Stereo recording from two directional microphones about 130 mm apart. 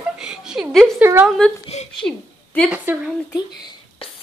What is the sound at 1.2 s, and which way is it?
A woman's voice, centre (ahead or behind).